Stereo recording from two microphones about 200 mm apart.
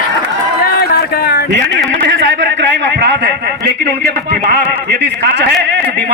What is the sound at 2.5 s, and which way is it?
A man's voice, 65° right (ahead or behind).